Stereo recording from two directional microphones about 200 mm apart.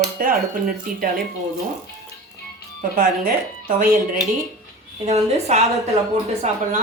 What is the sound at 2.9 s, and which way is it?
Speech, 45° right (ahead or behind).